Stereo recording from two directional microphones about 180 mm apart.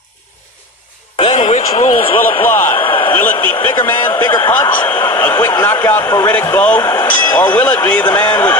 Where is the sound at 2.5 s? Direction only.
10° left (ahead or behind).